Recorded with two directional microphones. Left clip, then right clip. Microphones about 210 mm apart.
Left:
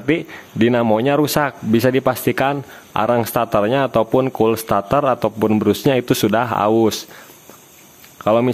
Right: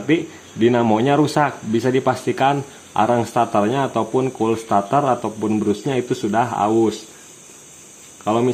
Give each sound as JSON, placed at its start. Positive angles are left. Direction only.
{"t": 0.0, "sound": "speech", "side_deg": 35}
{"t": 8.2, "sound": "speech", "side_deg": 45}